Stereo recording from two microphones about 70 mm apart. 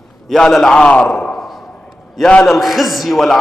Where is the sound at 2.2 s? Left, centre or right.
Centre.